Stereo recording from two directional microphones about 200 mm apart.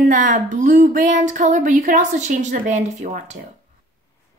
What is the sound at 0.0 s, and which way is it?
Music, 40° right (ahead or behind).